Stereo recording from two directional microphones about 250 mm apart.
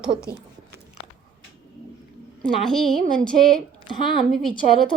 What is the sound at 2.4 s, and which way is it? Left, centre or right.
Speech, centre.